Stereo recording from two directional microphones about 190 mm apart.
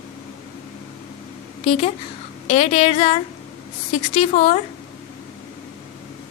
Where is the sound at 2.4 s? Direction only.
35° left (ahead or behind).